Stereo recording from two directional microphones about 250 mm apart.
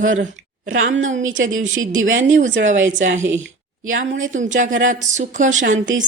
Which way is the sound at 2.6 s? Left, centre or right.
Right.